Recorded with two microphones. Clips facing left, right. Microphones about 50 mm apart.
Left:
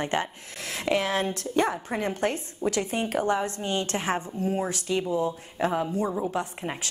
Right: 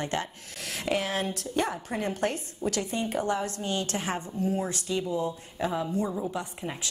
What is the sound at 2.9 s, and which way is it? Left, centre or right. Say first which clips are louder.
Speech: left 2 dB; left.